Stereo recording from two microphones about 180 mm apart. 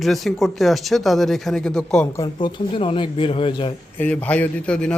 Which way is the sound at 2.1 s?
25° left (ahead or behind).